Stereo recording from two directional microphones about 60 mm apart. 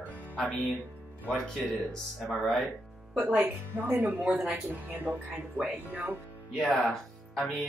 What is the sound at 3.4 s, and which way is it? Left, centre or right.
Speech, right.